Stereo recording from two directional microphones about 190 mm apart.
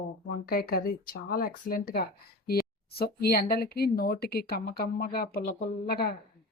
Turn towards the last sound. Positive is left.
turn(degrees=55)  # may be behind; listen again after turning